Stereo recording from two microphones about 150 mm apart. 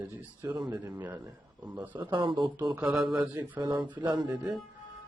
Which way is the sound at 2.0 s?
30° right (ahead or behind).